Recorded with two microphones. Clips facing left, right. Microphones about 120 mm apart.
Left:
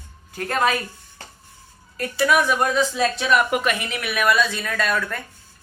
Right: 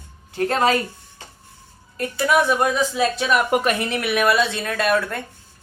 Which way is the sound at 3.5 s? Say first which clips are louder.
Right 3 dB; 35° right (ahead or behind).